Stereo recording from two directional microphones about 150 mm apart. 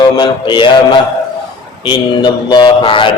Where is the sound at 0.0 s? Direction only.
30° left (ahead or behind).